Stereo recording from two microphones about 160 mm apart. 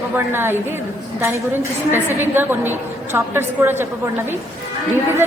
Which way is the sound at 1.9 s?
15° right (ahead or behind).